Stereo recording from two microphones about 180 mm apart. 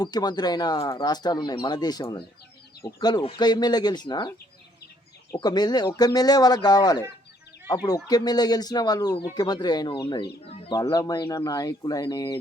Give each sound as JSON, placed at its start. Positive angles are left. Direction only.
{"t": 0.0, "sound": "speech", "side_deg": 25}
{"t": 5.4, "sound": "speech", "side_deg": 25}
{"t": 10.8, "sound": "speech", "side_deg": 20}